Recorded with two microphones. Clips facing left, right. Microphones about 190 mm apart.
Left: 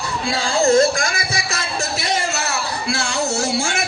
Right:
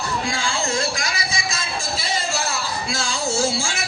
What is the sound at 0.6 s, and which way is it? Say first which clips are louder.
Music: left 14 dB; 45° left (ahead or behind).